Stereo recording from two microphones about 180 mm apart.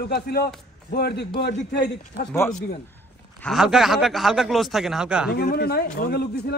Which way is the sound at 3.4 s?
Centre (ahead or behind).